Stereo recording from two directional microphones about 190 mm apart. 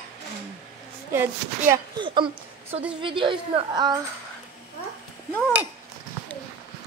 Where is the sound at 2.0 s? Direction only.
25° right (ahead or behind).